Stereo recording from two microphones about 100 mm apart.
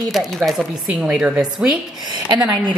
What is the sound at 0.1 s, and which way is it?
A woman's voice, centre (ahead or behind).